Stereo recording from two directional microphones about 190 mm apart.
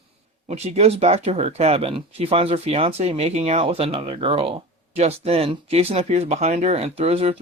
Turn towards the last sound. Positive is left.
turn(degrees=-30)  # may be behind; listen again after turning